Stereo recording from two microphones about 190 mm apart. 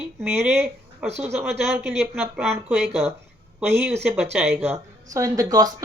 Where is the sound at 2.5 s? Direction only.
5° right (ahead or behind).